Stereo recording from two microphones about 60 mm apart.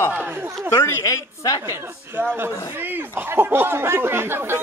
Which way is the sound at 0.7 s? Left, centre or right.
Left.